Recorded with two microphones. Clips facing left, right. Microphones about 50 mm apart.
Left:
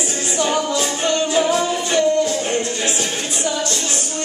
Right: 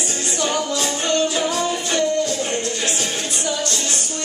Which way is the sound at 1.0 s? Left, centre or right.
Centre.